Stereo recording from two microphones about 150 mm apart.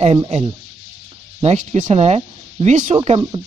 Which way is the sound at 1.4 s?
50° right (ahead or behind).